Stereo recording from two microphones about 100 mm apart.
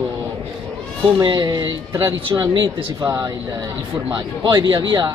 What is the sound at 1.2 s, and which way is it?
Speech, 45° right (ahead or behind).